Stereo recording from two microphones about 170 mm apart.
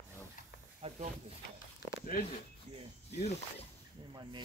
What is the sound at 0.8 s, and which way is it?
Snake, 35° right (ahead or behind).